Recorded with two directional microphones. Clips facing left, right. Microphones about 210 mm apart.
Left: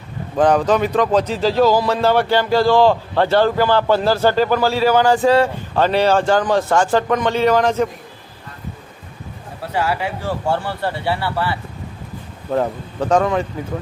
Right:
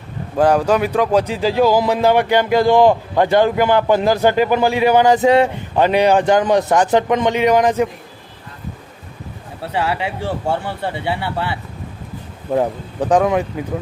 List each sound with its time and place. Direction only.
0.3 s speech: 10° right (ahead or behind)
9.7 s speech: 25° right (ahead or behind)